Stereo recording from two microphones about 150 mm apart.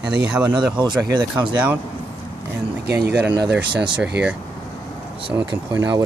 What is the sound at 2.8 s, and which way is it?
Speech, 90° right.